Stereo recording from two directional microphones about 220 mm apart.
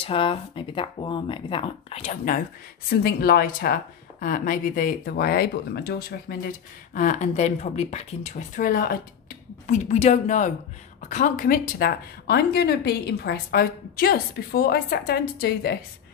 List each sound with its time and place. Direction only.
0.0 s speech: 25° left (ahead or behind)
2.9 s a woman's voice: 45° left (ahead or behind)